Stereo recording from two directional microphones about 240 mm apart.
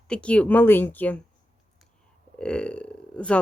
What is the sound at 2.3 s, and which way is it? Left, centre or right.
Speech, centre.